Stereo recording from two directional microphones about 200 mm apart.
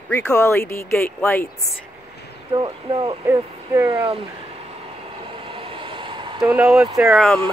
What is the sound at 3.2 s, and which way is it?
Speech, 15° right (ahead or behind).